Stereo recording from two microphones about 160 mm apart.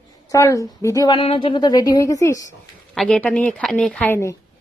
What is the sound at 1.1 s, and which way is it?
A woman's voice, 35° left (ahead or behind).